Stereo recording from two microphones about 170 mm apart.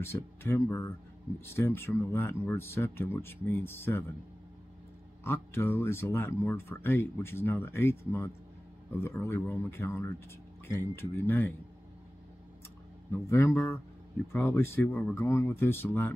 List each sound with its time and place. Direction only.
0.0 s speech: 15° left (ahead or behind)
5.2 s speech: 15° left (ahead or behind)
13.3 s speech: 15° left (ahead or behind)